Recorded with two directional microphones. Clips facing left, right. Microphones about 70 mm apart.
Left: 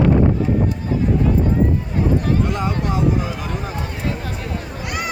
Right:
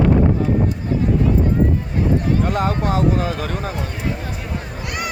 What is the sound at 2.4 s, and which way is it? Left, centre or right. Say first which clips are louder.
Speech: right 2 dB; right.